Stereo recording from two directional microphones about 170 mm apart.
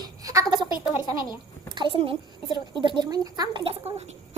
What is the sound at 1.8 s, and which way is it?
A child's voice, 30° right (ahead or behind).